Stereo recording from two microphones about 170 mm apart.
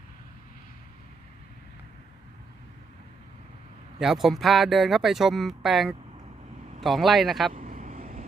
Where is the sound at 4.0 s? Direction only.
Centre (ahead or behind).